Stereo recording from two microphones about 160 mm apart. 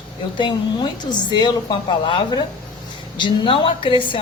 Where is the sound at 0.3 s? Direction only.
30° left (ahead or behind).